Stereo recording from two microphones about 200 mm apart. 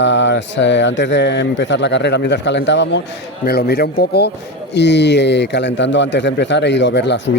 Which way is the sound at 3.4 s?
50° left (ahead or behind).